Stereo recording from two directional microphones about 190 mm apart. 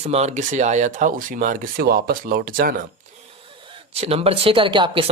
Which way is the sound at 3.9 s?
30° right (ahead or behind).